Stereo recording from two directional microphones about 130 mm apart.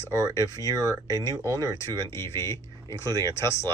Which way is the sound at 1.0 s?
25° left (ahead or behind).